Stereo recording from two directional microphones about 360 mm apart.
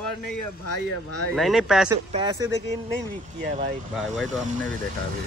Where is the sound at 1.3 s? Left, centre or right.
Centre.